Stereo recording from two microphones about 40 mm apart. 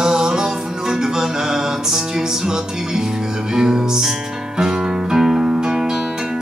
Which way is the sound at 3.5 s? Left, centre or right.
Centre.